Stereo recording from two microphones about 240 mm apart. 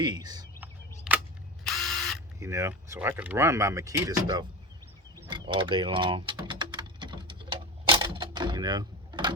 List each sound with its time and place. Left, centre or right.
0.0 s speech: centre
0.6 s a sound: centre
1.6 s drill: centre
2.4 s speech: centre
5.3 s typing: centre